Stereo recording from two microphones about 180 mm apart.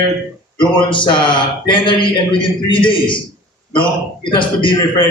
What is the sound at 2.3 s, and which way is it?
A man's voice, 25° left (ahead or behind).